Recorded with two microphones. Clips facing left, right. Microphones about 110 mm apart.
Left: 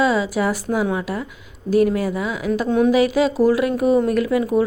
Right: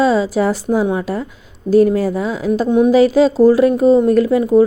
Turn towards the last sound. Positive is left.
turn(degrees=-30)  # may be behind; listen again after turning